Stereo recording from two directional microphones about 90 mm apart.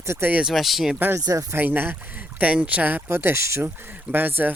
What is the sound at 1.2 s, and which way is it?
Speech, 35° right (ahead or behind).